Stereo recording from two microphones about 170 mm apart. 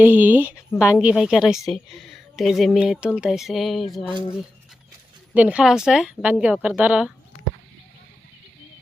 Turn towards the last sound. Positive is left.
turn(degrees=-5)  # may be behind; listen again after turning